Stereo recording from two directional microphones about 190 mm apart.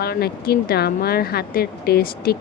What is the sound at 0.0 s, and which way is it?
Speech, 55° left (ahead or behind).